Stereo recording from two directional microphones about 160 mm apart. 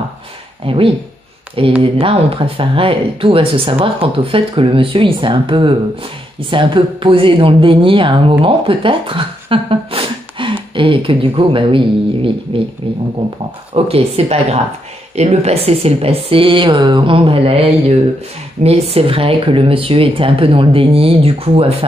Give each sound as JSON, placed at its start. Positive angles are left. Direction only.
{"t": 0.7, "sound": "a woman's voice", "side_deg": -35}